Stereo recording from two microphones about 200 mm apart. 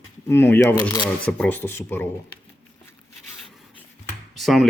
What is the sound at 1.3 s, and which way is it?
Speech, 5° left (ahead or behind).